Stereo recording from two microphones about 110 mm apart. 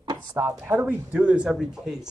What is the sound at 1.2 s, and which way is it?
Speech, 5° right (ahead or behind).